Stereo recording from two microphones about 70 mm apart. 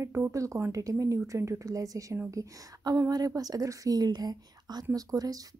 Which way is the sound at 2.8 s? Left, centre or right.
Right.